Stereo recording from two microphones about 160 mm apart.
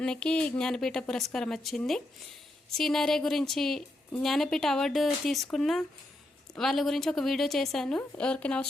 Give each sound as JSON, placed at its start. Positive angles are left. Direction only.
{"t": 0.0, "sound": "a woman's voice", "side_deg": 5}